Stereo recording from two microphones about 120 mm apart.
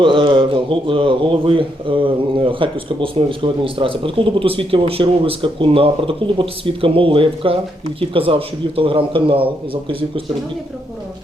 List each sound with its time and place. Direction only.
0.0 s a man's voice: 45° right (ahead or behind)